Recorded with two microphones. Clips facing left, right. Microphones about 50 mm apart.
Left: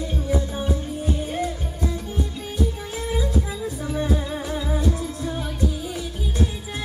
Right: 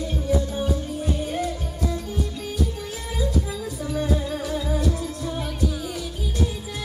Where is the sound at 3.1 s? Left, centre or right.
Centre.